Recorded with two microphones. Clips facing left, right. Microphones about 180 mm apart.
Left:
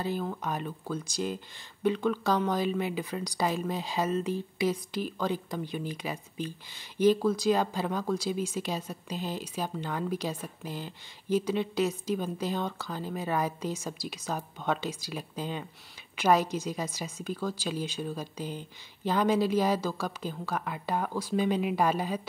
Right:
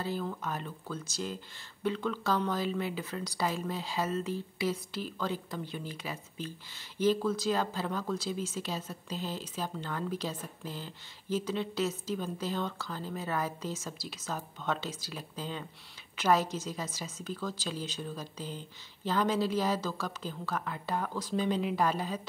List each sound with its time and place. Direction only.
0.0 s speech: 20° left (ahead or behind)